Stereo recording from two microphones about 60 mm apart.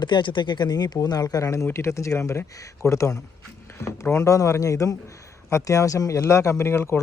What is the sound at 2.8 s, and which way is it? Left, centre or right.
Speech, left.